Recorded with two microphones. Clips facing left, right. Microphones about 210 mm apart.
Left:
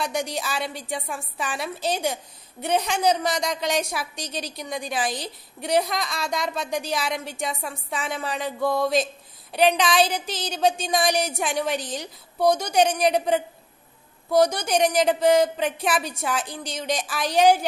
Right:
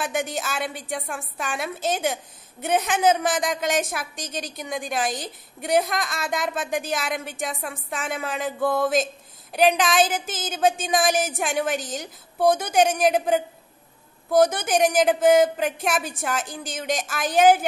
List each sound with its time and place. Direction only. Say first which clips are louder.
0.0 s a woman's voice: even; 5° right (ahead or behind)
10.0 s a woman's voice: even; 50° right (ahead or behind)
10.9 s a woman's voice: right 1 dB; centre (ahead or behind)
11.7 s a woman's voice: even; 45° right (ahead or behind)
12.4 s a woman's voice: right 1 dB; 5° right (ahead or behind)
17.2 s a woman's voice: right 1 dB; 50° right (ahead or behind)